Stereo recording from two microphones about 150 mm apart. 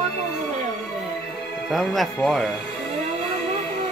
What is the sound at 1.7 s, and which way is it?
Speech, centre (ahead or behind).